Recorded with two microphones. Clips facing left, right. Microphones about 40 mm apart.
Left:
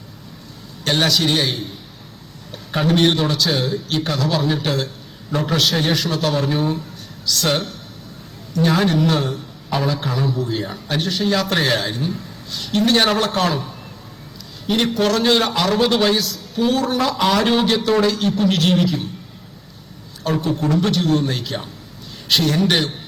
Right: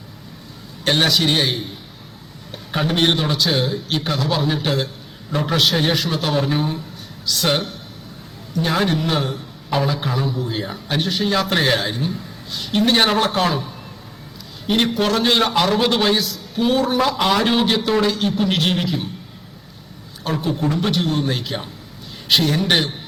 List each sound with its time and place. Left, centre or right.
0.9 s a man's voice: centre
2.7 s a man's voice: centre
14.7 s a man's voice: centre
20.4 s a man's voice: centre